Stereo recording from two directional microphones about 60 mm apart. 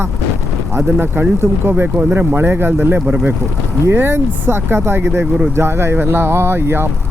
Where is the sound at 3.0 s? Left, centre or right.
Right.